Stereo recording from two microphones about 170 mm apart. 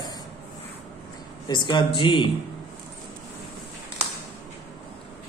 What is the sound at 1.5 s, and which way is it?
Speech, 25° left (ahead or behind).